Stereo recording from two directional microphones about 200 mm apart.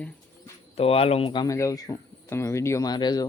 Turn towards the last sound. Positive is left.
turn(degrees=20)  # may be behind; listen again after turning